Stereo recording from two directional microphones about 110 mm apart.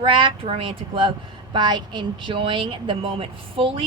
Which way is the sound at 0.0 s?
50° right (ahead or behind).